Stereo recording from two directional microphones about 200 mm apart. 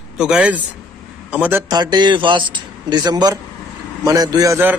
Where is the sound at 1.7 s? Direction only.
20° right (ahead or behind).